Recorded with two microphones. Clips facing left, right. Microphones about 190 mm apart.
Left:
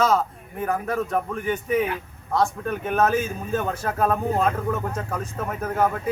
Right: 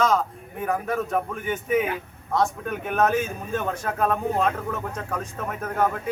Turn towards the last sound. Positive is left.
turn(degrees=5)  # may be behind; listen again after turning